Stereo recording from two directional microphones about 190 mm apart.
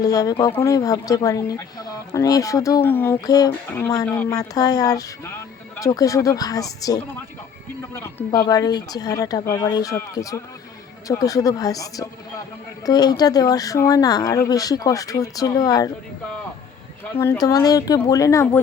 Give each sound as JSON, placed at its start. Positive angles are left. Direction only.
{"t": 0.0, "sound": "speech", "side_deg": 20}
{"t": 8.0, "sound": "speech", "side_deg": 20}
{"t": 17.2, "sound": "speech", "side_deg": 15}